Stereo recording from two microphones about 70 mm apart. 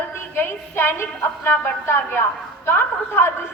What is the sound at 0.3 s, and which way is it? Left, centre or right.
A woman's voice, left.